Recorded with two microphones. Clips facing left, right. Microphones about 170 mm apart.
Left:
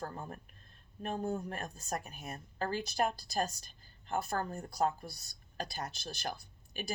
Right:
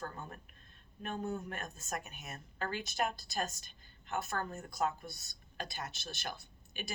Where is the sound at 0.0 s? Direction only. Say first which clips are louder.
Left 3 dB; 35° left (ahead or behind).